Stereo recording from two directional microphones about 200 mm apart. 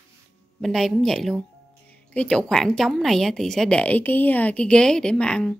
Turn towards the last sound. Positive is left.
turn(degrees=5)  # may be behind; listen again after turning